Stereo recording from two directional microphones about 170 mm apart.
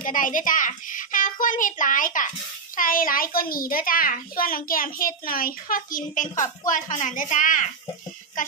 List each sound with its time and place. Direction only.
0.0 s a child's voice: 55° left (ahead or behind)